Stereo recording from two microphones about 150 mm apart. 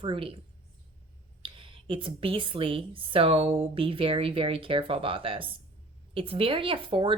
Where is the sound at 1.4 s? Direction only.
35° right (ahead or behind).